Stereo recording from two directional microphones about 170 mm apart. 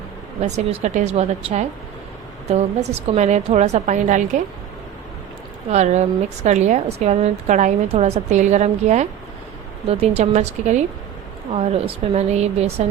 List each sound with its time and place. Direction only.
0.4 s a woman's voice: 40° right (ahead or behind)
5.7 s a woman's voice: 40° right (ahead or behind)
12.1 s a woman's voice: 40° right (ahead or behind)